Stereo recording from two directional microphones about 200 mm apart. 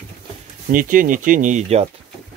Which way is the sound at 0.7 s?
40° right (ahead or behind).